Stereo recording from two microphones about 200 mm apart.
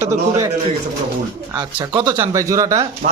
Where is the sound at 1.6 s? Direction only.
20° right (ahead or behind).